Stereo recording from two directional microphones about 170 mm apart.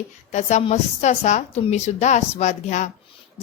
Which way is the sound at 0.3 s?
45° left (ahead or behind).